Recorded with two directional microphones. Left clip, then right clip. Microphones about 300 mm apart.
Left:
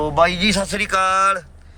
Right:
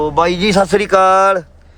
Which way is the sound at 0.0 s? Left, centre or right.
Centre.